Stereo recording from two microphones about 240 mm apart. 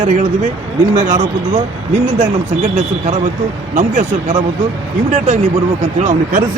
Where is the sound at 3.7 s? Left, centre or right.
Right.